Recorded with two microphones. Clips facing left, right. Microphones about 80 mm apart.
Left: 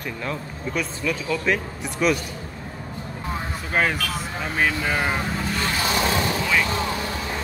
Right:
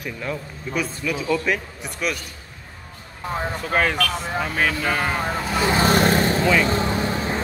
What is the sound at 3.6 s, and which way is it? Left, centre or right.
Speech, centre.